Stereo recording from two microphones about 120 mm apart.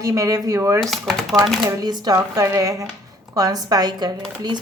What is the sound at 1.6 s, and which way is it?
A woman's voice, 35° right (ahead or behind).